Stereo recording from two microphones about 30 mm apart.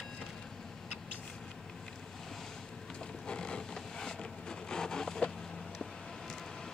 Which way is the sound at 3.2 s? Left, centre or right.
Left.